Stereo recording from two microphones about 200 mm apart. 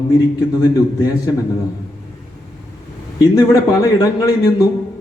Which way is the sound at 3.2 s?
15° left (ahead or behind).